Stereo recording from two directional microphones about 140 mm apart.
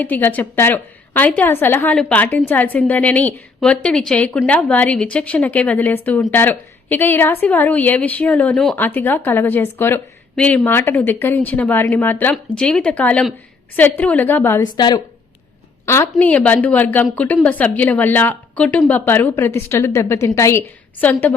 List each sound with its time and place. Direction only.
0.0 s a woman's voice: 15° left (ahead or behind)
14.6 s a woman's voice: 30° left (ahead or behind)
16.1 s a woman's voice: 10° left (ahead or behind)